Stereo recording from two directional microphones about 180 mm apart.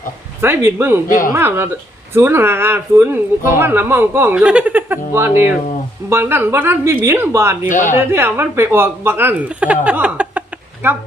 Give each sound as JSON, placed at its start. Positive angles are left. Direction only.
{"t": 0.4, "sound": "speech", "side_deg": -15}
{"t": 1.0, "sound": "a woman's voice", "side_deg": 50}
{"t": 1.3, "sound": "speech", "side_deg": -15}
{"t": 7.7, "sound": "a woman's voice", "side_deg": 45}
{"t": 7.9, "sound": "speech", "side_deg": -15}